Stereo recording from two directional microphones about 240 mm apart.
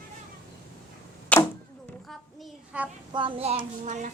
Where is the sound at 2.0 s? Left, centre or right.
Centre.